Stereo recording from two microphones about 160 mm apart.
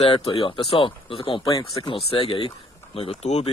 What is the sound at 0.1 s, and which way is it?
Speech, 35° left (ahead or behind).